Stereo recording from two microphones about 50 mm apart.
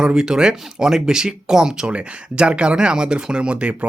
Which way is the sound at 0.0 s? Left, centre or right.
Centre.